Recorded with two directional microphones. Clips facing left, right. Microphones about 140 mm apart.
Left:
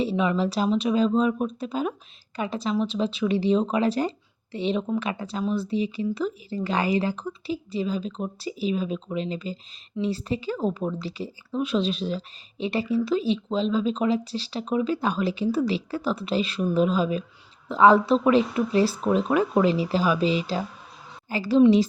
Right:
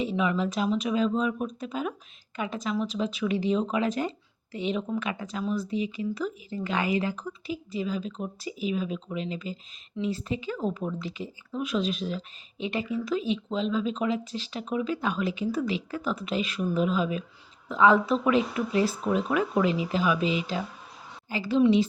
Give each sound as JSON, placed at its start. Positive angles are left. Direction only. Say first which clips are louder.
{"t": 0.0, "sound": "a woman's voice", "louder": "left 3 dB", "side_deg": 30}